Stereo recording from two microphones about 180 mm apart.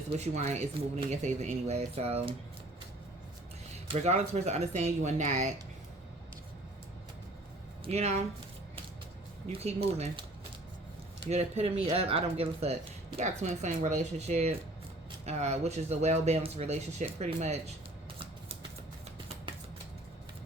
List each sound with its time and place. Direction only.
0.1 s speech: 35° right (ahead or behind)
3.8 s speech: 35° right (ahead or behind)
7.9 s speech: 35° right (ahead or behind)
9.5 s speech: 35° right (ahead or behind)
11.3 s speech: 35° right (ahead or behind)